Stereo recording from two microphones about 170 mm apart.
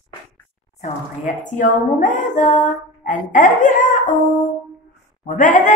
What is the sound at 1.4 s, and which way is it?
Speech, 50° left (ahead or behind).